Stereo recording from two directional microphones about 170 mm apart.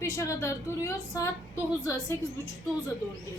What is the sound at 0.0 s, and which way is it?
A woman's voice, 15° left (ahead or behind).